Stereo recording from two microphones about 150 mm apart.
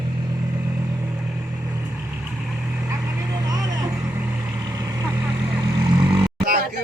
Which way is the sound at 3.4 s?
25° right (ahead or behind).